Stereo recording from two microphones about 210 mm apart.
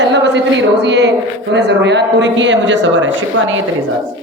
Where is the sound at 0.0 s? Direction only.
55° right (ahead or behind).